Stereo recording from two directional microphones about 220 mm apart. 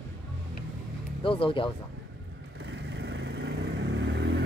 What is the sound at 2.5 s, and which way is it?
Vehicle, 50° right (ahead or behind).